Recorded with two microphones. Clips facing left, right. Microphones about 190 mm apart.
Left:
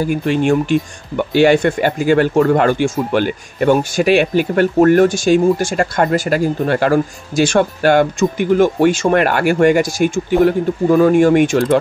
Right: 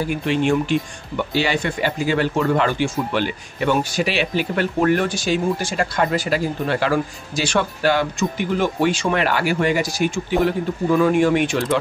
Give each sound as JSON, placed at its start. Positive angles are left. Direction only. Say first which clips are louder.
{"t": 0.1, "sound": "speech", "louder": "left 3 dB", "side_deg": 45}